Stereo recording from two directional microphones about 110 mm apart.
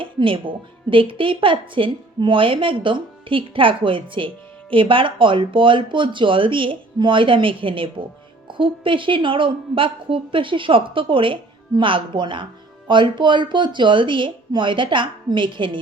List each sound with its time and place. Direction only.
0.0 s a woman's voice: 50° right (ahead or behind)